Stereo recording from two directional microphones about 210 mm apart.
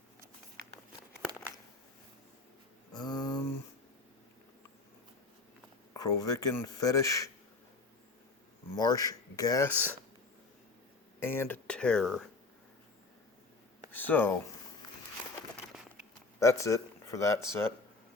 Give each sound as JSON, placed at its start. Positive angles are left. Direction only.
{"t": 3.0, "sound": "a sound", "side_deg": 15}
{"t": 5.9, "sound": "speech", "side_deg": 15}
{"t": 8.7, "sound": "speech", "side_deg": 20}
{"t": 11.2, "sound": "speech", "side_deg": 10}
{"t": 13.9, "sound": "speech", "side_deg": 10}
{"t": 16.4, "sound": "speech", "side_deg": 15}